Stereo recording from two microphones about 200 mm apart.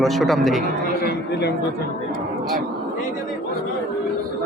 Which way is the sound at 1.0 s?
55° left (ahead or behind).